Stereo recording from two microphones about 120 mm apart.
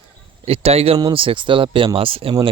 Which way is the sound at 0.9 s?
40° right (ahead or behind).